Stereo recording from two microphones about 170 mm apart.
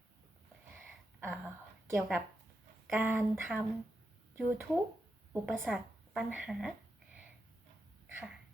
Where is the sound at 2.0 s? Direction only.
Centre (ahead or behind).